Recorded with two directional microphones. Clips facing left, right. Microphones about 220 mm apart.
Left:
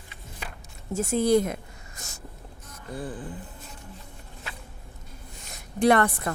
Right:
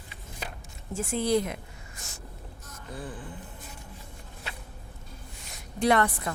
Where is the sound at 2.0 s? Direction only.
40° left (ahead or behind).